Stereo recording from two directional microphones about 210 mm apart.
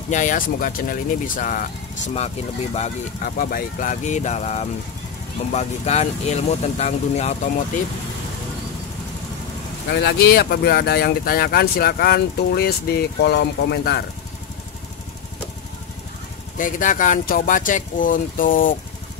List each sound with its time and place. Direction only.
0.1 s speech: 35° left (ahead or behind)
9.8 s speech: 50° left (ahead or behind)
16.5 s speech: 40° left (ahead or behind)